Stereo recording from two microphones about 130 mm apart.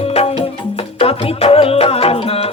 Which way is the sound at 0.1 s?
55° left (ahead or behind).